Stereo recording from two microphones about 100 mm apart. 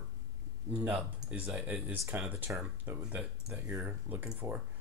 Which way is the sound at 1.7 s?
5° right (ahead or behind).